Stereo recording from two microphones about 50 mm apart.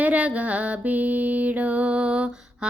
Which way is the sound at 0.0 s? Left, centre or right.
Right.